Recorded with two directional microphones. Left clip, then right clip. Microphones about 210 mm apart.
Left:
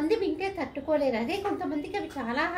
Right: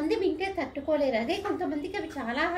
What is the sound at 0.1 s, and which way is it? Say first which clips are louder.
A woman's voice: even; 5° left (ahead or behind).